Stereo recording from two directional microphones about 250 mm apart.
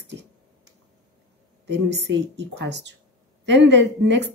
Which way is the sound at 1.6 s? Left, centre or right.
Right.